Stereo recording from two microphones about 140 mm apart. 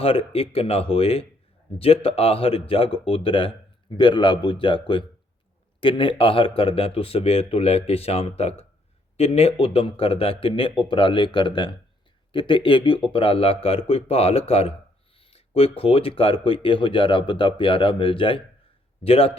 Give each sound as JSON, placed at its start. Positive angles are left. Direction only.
{"t": 0.0, "sound": "a man's voice", "side_deg": 45}